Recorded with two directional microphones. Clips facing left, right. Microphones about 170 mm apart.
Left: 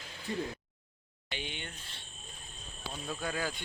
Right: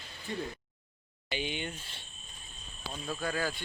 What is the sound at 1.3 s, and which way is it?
Speech, 5° right (ahead or behind).